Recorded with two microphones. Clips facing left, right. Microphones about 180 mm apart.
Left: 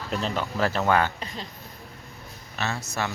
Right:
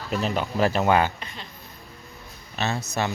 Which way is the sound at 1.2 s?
35° left (ahead or behind).